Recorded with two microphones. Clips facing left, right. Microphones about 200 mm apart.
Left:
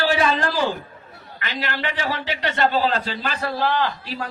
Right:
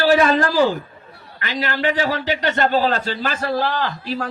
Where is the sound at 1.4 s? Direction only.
45° right (ahead or behind).